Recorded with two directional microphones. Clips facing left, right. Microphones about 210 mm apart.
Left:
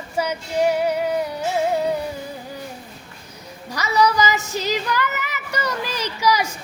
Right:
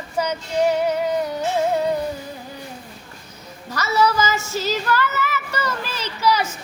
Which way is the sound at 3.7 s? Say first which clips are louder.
Even; 15° left (ahead or behind).